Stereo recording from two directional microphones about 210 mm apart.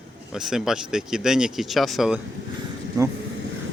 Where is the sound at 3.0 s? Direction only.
15° right (ahead or behind).